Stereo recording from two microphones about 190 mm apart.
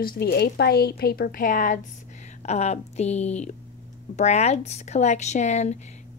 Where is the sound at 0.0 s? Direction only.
55° left (ahead or behind).